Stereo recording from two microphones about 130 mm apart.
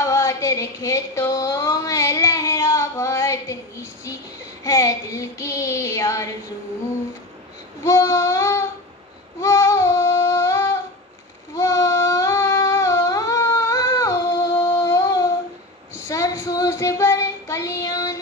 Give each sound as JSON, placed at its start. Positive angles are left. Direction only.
{"t": 0.0, "sound": "a sound", "side_deg": 25}
{"t": 4.6, "sound": "child singing", "side_deg": 25}
{"t": 7.8, "sound": "child singing", "side_deg": 25}
{"t": 9.4, "sound": "a sound", "side_deg": 25}
{"t": 11.5, "sound": "singing", "side_deg": 25}
{"t": 16.1, "sound": "child singing", "side_deg": 25}